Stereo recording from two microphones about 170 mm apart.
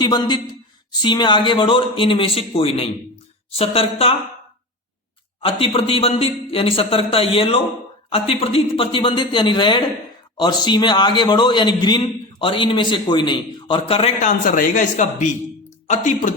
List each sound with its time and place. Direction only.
0.0 s a man's voice: 25° left (ahead or behind)
5.4 s a man's voice: 30° left (ahead or behind)
14.2 s speech: 50° left (ahead or behind)